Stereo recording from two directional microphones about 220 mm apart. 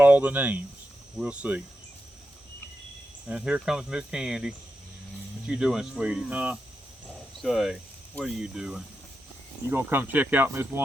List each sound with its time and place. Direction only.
0.0 s speech: 10° right (ahead or behind)
1.2 s cricket: 5° right (ahead or behind)
3.2 s cricket: 5° right (ahead or behind)
7.4 s speech: centre (ahead or behind)